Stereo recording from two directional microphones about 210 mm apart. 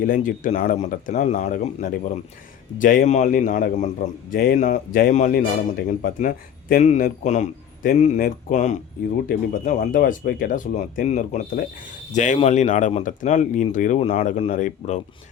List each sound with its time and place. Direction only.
0.0 s a man's voice: 40° left (ahead or behind)